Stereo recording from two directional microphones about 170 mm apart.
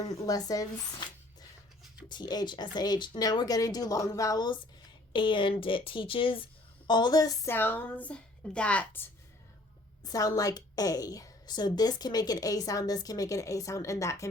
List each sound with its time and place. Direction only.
0.0 s a woman's voice: 20° left (ahead or behind)
10.0 s a woman's voice: 20° left (ahead or behind)